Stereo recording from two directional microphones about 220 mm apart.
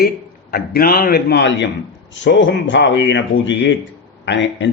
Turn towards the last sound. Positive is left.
turn(degrees=55)  # may be behind; listen again after turning